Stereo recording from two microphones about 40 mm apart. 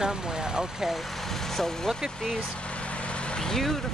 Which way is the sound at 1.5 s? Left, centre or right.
Centre.